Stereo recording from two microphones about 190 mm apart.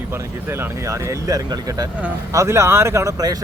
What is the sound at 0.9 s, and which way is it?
Speech, 15° right (ahead or behind).